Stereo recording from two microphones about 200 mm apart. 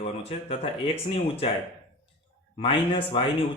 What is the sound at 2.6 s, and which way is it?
Speech, 25° left (ahead or behind).